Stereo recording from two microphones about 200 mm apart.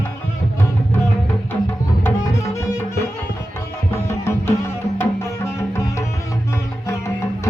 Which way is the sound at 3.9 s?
15° left (ahead or behind).